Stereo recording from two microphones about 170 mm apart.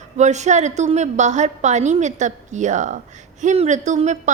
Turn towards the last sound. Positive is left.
turn(degrees=-45)  # may be behind; listen again after turning